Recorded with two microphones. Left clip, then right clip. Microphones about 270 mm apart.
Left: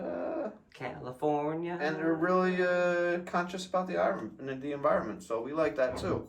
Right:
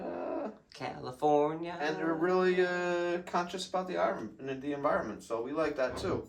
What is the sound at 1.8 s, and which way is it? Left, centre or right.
Speech, centre.